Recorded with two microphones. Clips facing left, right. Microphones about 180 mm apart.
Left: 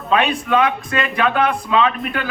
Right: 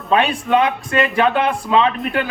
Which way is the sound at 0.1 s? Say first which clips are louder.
Right 1 dB; 30° right (ahead or behind).